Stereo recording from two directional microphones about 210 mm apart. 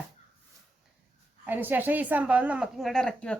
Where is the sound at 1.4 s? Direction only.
10° right (ahead or behind).